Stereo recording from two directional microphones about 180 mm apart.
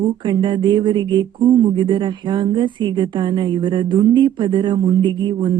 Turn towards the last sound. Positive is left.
turn(degrees=-25)  # may be behind; listen again after turning